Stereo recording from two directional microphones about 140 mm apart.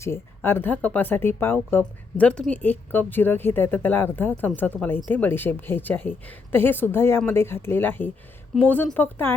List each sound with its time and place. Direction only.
0.0 s speech: 15° left (ahead or behind)